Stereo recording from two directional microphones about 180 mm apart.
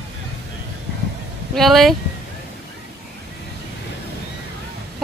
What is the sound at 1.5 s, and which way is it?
Speech, centre (ahead or behind).